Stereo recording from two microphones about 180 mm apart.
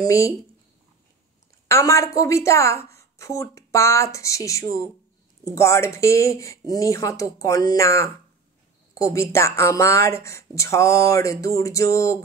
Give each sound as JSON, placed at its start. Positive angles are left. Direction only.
{"t": 0.0, "sound": "speech", "side_deg": 20}
{"t": 1.7, "sound": "speech", "side_deg": 15}